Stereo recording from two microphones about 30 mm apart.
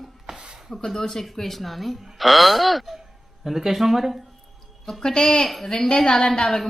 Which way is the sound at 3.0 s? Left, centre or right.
Centre.